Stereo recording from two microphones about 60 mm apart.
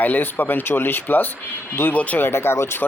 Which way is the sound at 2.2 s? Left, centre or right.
Left.